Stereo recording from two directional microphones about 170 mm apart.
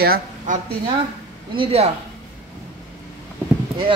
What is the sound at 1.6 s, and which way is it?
Speech, 35° right (ahead or behind).